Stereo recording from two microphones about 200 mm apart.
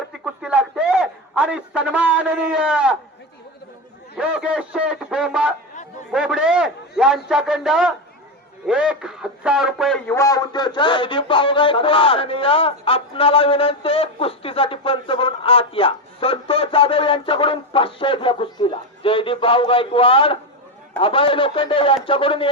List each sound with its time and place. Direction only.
0.4 s a man's voice: 5° right (ahead or behind)
4.2 s a man's voice: 5° right (ahead or behind)
10.2 s speech: 20° left (ahead or behind)